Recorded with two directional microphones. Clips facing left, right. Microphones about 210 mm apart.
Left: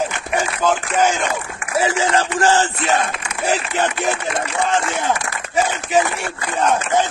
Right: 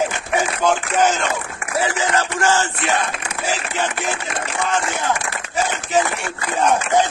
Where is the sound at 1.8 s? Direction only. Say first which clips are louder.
Left 3 dB; 25° left (ahead or behind).